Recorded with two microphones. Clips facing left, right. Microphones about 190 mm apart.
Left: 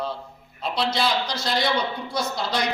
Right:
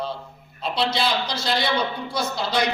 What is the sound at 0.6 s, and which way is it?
Speech, centre (ahead or behind).